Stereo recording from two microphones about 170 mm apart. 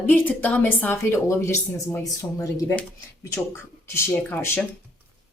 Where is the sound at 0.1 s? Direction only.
10° left (ahead or behind).